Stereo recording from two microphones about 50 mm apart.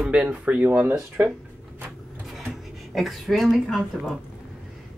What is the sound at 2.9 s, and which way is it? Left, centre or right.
Speech, centre.